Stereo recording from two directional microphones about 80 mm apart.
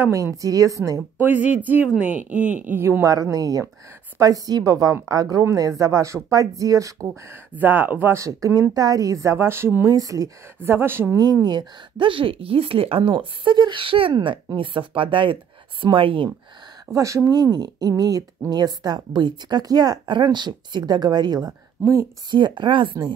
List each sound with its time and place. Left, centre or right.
0.1 s speech: right
1.2 s speech: right
7.5 s speech: right
8.1 s speech: right
9.8 s speech: right
10.6 s speech: right
11.4 s speech: right
16.9 s speech: right
17.3 s speech: right
21.8 s speech: right
22.3 s speech: right